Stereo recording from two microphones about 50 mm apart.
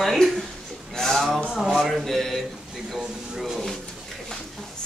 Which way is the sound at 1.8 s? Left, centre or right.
Centre.